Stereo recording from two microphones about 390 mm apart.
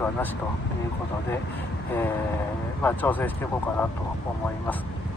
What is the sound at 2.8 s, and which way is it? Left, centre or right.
Speech, centre.